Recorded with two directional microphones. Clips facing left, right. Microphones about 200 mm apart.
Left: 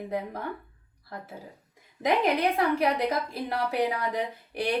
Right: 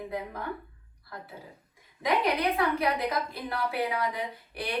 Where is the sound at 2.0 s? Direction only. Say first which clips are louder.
Left 2 dB; 45° left (ahead or behind).